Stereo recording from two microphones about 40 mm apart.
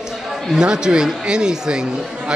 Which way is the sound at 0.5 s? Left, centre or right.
Centre.